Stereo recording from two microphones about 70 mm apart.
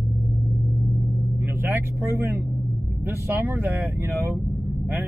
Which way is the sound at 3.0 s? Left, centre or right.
Right.